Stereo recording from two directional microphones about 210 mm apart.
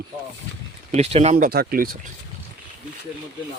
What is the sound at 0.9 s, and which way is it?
Speech, 30° right (ahead or behind).